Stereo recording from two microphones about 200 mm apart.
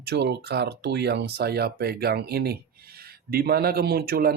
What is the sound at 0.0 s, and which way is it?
Speech, 55° right (ahead or behind).